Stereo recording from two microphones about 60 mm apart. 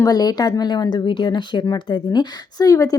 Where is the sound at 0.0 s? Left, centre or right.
Left.